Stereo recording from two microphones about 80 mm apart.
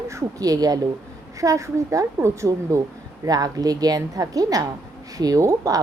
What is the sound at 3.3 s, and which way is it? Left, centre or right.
A woman's voice, right.